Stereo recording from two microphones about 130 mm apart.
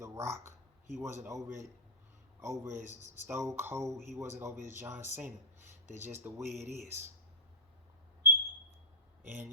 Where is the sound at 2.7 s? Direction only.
65° right (ahead or behind).